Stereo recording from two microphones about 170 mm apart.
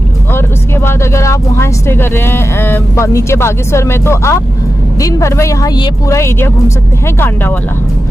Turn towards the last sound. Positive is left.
turn(degrees=10)  # may be behind; listen again after turning